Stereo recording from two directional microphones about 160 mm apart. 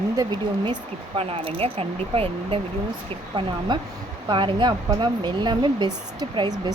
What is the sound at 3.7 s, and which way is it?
Speech, 25° right (ahead or behind).